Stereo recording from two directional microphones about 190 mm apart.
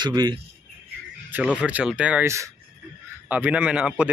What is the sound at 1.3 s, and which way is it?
A man's voice, 5° right (ahead or behind).